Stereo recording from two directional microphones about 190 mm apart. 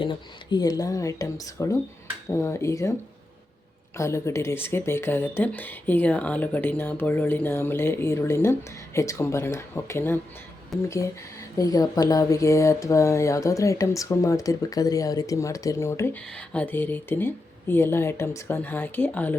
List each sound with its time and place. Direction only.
0.0 s speech: 25° left (ahead or behind)
3.9 s speech: 15° left (ahead or behind)